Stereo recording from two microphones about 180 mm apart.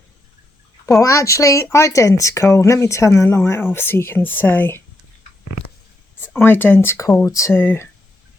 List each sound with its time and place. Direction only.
0.9 s speech: 20° left (ahead or behind)
6.4 s speech: 10° left (ahead or behind)